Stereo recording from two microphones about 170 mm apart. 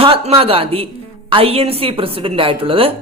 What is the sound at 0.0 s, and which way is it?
Speech, 35° right (ahead or behind).